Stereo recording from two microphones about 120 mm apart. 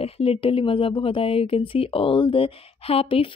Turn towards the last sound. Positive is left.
turn(degrees=55)  # may be behind; listen again after turning